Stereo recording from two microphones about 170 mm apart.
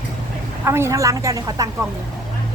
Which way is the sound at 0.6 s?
15° right (ahead or behind).